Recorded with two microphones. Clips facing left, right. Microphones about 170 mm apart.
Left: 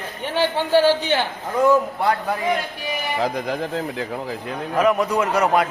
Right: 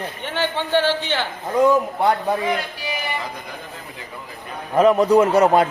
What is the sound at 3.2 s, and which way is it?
Speech, 90° left.